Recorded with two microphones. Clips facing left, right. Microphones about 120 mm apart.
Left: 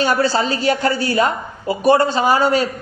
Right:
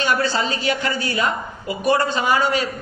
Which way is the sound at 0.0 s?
35° left (ahead or behind).